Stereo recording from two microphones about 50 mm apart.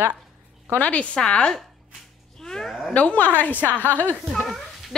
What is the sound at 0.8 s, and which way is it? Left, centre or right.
Speech, left.